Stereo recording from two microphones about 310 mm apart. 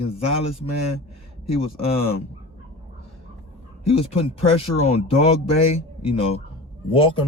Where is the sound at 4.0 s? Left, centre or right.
Centre.